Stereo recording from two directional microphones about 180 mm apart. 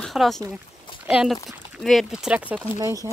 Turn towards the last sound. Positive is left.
turn(degrees=-20)  # may be behind; listen again after turning